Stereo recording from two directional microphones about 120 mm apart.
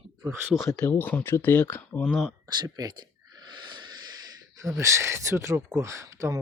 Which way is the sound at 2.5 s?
35° right (ahead or behind).